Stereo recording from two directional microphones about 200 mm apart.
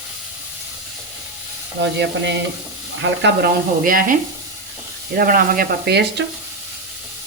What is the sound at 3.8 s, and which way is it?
Speech, 45° right (ahead or behind).